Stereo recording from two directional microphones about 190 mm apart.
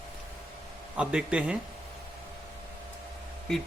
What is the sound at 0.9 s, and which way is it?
Speech, 5° right (ahead or behind).